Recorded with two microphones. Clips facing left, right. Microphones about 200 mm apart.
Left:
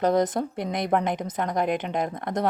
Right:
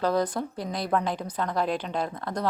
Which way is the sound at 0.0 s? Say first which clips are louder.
Left 3 dB; 20° left (ahead or behind).